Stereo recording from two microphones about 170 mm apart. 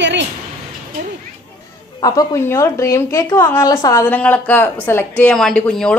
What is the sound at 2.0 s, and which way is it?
Speech, 20° left (ahead or behind).